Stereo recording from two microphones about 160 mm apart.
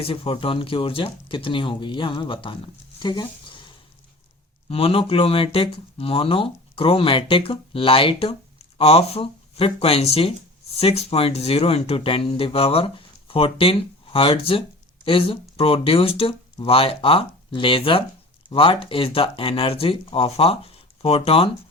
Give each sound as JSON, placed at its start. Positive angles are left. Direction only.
{"t": 0.0, "sound": "speech", "side_deg": 35}
{"t": 3.0, "sound": "a sound", "side_deg": 25}
{"t": 4.7, "sound": "speech", "side_deg": 35}